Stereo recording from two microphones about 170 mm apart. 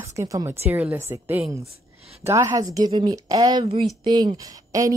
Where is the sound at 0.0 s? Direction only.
15° right (ahead or behind).